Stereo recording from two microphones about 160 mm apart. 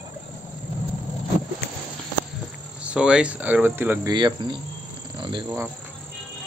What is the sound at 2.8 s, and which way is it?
Speech, 5° right (ahead or behind).